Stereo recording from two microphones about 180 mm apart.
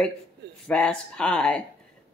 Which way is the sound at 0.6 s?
5° left (ahead or behind).